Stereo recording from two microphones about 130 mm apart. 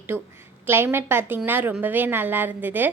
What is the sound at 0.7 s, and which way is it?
A woman's voice, 15° right (ahead or behind).